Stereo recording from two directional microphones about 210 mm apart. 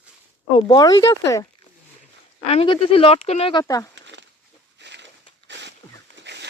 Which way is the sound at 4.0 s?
60° right (ahead or behind).